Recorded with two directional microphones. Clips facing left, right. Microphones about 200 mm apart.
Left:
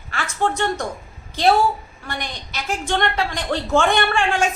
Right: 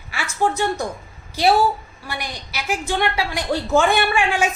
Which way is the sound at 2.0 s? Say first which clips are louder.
Even; 10° right (ahead or behind).